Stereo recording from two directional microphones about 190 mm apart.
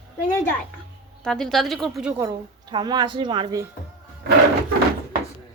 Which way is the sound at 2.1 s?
20° right (ahead or behind).